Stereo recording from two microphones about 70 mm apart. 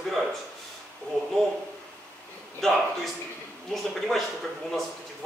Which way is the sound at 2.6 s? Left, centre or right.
Centre.